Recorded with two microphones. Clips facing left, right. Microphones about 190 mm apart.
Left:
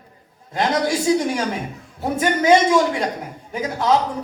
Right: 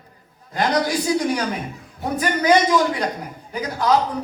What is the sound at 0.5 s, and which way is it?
A man's voice, 25° left (ahead or behind).